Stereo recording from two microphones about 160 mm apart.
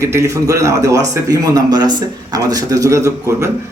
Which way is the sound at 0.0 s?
15° right (ahead or behind).